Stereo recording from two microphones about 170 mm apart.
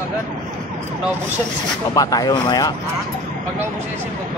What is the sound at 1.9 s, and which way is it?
Speech, 20° left (ahead or behind).